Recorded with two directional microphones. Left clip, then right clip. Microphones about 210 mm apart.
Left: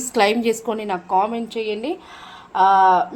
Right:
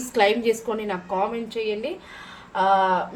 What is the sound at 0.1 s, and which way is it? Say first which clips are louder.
A woman's voice: left 2 dB; 40° left (ahead or behind).